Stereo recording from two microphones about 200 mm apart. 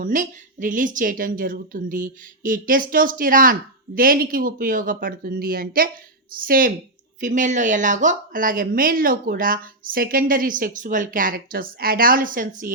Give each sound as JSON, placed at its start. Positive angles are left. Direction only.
{"t": 0.0, "sound": "a woman's voice", "side_deg": -40}